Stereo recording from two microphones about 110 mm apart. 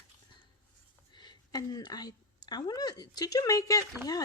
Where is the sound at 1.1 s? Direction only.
40° left (ahead or behind).